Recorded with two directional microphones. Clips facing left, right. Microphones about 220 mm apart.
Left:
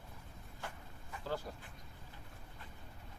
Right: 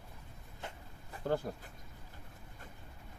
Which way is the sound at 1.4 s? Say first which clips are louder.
Right 6 dB; 55° right (ahead or behind).